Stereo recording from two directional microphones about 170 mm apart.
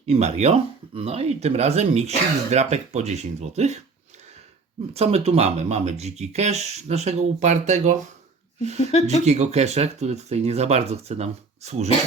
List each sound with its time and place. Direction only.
0.1 s speech: 40° right (ahead or behind)
4.9 s speech: 35° right (ahead or behind)
8.8 s speech: 40° left (ahead or behind)
9.2 s speech: 40° right (ahead or behind)